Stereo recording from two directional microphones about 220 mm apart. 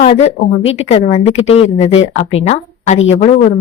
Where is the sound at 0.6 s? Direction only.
30° left (ahead or behind).